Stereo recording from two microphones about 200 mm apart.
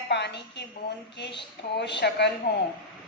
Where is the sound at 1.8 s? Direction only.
60° left (ahead or behind).